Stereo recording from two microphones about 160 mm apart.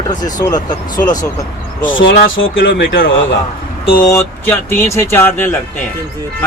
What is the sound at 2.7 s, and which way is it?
Speech, 90° left.